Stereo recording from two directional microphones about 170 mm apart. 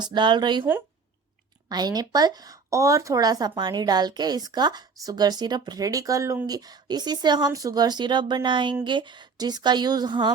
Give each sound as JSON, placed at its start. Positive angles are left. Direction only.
{"t": 0.0, "sound": "speech", "side_deg": -25}
{"t": 1.7, "sound": "speech", "side_deg": -25}